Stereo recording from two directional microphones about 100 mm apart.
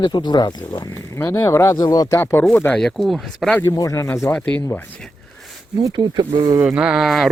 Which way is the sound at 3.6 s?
35° left (ahead or behind).